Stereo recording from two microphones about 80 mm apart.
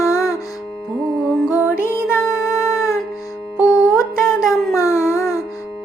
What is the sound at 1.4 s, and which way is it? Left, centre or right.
Music, left.